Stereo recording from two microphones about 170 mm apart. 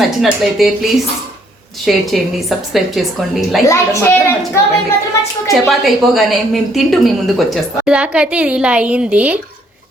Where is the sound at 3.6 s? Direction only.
15° left (ahead or behind).